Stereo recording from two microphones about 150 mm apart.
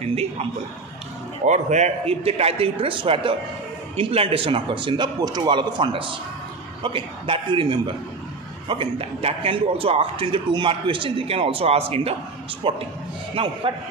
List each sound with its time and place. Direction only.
0.0 s a man's voice: 45° right (ahead or behind)